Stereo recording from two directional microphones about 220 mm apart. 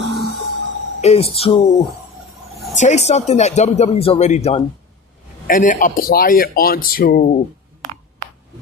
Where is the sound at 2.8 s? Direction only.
30° left (ahead or behind).